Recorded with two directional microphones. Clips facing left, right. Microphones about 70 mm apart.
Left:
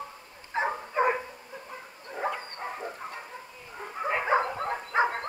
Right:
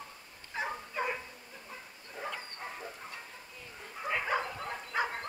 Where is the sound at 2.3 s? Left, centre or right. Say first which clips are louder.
Left 6 dB; left.